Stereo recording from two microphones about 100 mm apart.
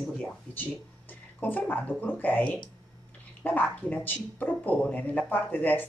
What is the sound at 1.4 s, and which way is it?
Speech, 15° left (ahead or behind).